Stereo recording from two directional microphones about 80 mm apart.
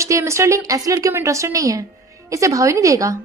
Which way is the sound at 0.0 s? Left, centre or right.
Right.